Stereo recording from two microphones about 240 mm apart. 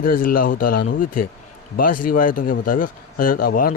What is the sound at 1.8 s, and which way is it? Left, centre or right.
Speech, left.